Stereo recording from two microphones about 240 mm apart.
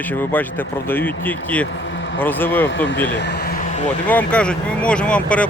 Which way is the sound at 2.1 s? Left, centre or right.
Centre.